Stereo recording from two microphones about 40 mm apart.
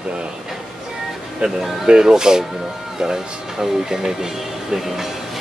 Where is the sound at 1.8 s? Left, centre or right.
Centre.